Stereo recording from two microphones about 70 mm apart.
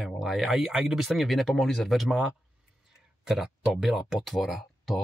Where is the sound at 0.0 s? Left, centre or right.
Centre.